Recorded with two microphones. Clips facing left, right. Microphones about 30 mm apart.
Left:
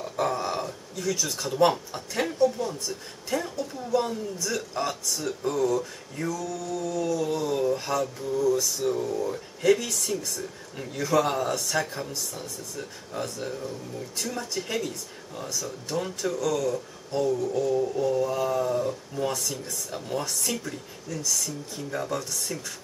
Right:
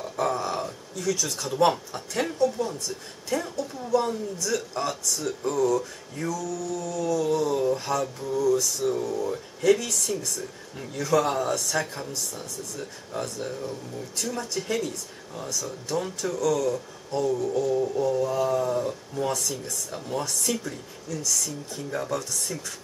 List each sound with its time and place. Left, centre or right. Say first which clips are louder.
0.0 s a sound: even; centre
0.9 s speech: right 1 dB; centre
1.5 s speech: even; centre
6.8 s a sound: left 1 dB; left
7.2 s speech: right 2 dB; centre
8.4 s speech: right 1 dB; centre
16.3 s speech: right 4 dB; centre
17.3 s speech: right 1 dB; centre
22.1 s speech: right 1 dB; centre